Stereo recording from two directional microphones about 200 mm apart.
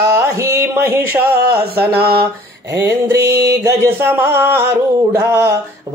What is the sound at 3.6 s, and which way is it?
Music, 15° right (ahead or behind).